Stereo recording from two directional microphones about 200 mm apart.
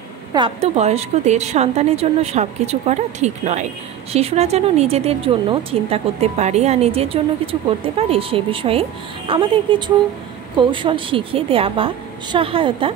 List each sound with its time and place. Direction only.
0.3 s a woman's voice: 25° right (ahead or behind)